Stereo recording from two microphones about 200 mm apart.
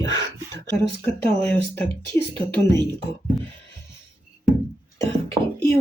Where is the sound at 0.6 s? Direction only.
10° left (ahead or behind).